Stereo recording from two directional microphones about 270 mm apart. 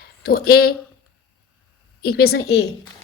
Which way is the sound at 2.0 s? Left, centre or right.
Left.